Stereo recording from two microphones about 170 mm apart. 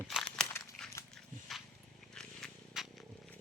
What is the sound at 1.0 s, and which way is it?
Dog, 15° left (ahead or behind).